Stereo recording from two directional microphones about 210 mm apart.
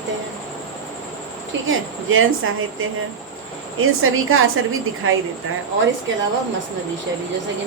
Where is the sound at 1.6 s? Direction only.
70° right (ahead or behind).